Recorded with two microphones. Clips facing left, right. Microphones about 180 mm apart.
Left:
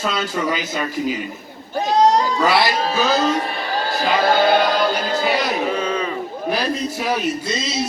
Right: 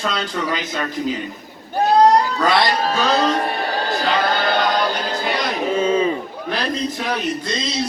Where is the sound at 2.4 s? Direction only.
5° left (ahead or behind).